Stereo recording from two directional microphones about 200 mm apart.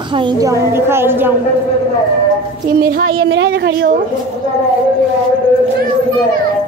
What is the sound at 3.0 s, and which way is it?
Speech, 75° right (ahead or behind).